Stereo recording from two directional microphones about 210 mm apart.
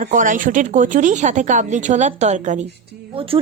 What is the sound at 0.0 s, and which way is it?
A woman's voice, 35° right (ahead or behind).